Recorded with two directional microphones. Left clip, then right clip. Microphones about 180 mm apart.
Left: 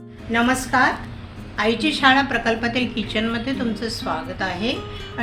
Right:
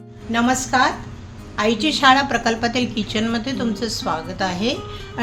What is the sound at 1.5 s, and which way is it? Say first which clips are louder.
A woman's voice: right 1 dB; 70° right (ahead or behind).